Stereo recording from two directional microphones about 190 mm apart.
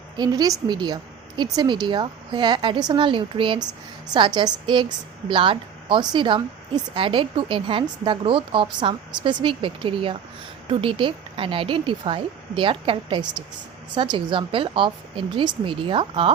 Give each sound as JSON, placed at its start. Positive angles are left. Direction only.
{"t": 0.2, "sound": "a woman's voice", "side_deg": -20}